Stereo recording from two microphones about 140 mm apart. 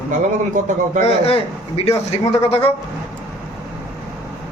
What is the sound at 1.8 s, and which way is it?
Speech, 45° left (ahead or behind).